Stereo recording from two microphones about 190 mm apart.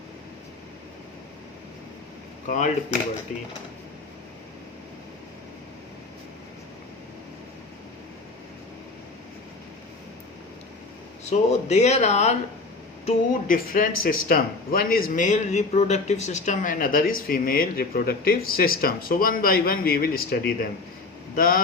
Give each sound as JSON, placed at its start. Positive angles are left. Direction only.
{"t": 2.5, "sound": "speech", "side_deg": 45}
{"t": 11.3, "sound": "speech", "side_deg": 35}